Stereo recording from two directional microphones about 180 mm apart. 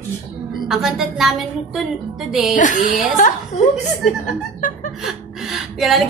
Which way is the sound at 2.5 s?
45° left (ahead or behind).